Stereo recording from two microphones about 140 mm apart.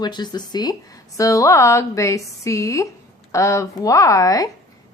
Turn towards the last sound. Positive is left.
turn(degrees=25)  # may be behind; listen again after turning